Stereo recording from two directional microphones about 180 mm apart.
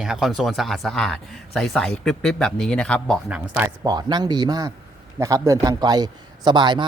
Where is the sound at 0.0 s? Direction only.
5° right (ahead or behind).